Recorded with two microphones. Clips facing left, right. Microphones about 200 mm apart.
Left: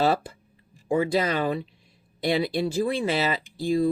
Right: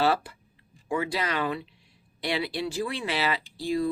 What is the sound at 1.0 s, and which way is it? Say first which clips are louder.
Speech: left 5 dB; 40° left (ahead or behind).